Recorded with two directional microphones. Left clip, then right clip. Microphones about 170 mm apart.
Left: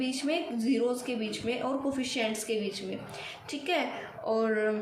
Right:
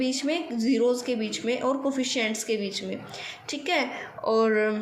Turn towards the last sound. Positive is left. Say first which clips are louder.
# right 5 dB
turn(degrees=-50)  # may be behind; listen again after turning